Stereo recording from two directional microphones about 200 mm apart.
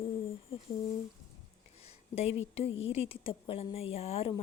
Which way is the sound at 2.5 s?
30° left (ahead or behind).